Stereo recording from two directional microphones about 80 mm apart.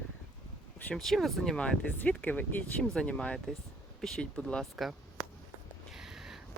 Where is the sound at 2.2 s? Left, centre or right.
Left.